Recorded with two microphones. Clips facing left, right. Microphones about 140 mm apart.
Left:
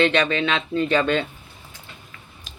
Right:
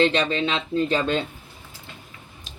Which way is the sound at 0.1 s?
65° left (ahead or behind).